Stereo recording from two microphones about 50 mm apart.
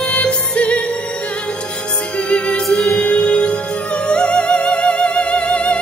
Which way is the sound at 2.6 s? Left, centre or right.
Centre.